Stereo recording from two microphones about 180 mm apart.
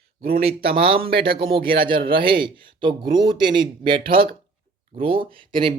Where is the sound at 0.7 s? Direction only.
30° right (ahead or behind).